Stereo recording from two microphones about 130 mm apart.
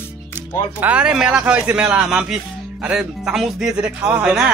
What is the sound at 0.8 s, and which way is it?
Speech, 10° right (ahead or behind).